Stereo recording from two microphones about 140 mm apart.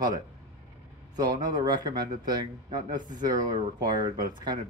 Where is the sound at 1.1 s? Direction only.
30° right (ahead or behind).